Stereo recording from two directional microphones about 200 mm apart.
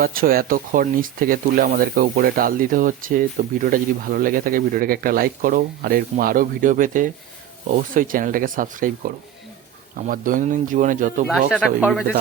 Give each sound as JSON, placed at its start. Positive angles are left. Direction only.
{"t": 0.0, "sound": "speech", "side_deg": -45}
{"t": 11.3, "sound": "speech", "side_deg": -5}